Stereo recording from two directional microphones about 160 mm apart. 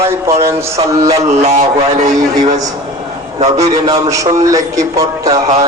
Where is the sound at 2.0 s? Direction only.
25° right (ahead or behind).